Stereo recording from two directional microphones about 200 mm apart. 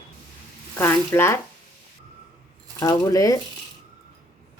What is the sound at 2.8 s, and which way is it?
Speech, 20° left (ahead or behind).